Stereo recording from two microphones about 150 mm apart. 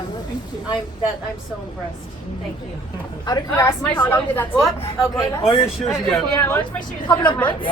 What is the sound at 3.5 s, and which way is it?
Speech, 15° left (ahead or behind).